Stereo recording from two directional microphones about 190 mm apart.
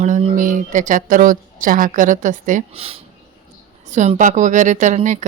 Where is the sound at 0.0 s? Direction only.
35° right (ahead or behind).